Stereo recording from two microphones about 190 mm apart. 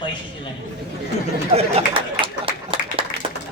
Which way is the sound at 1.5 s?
30° right (ahead or behind).